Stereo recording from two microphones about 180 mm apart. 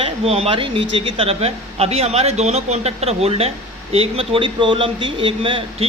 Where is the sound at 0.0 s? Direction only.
35° right (ahead or behind).